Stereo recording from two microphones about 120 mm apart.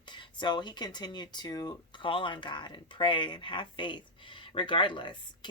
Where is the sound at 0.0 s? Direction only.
40° left (ahead or behind).